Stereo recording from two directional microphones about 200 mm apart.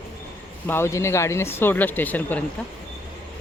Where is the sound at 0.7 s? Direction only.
10° left (ahead or behind).